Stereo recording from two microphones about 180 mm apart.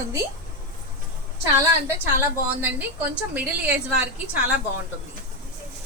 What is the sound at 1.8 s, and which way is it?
A woman's voice, 15° right (ahead or behind).